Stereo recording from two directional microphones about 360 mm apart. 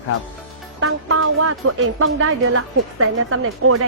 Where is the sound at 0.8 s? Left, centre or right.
Right.